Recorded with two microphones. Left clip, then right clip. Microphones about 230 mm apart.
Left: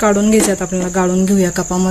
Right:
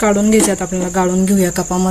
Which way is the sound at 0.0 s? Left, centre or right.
Centre.